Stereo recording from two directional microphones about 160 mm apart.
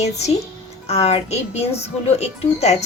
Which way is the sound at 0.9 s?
40° left (ahead or behind).